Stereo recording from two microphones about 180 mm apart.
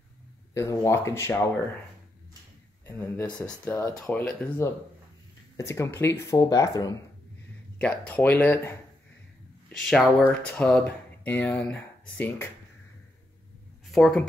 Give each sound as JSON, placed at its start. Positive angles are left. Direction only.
{"t": 0.6, "sound": "speech", "side_deg": 15}
{"t": 2.9, "sound": "speech", "side_deg": 15}
{"t": 7.8, "sound": "speech", "side_deg": 10}
{"t": 13.9, "sound": "speech", "side_deg": 5}